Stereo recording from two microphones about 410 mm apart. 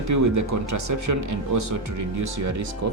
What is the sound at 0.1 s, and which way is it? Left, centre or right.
Speech, right.